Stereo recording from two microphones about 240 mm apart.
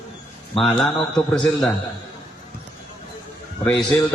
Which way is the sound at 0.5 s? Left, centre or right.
Centre.